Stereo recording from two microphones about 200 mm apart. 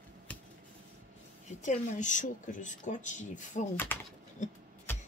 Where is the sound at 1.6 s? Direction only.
40° left (ahead or behind).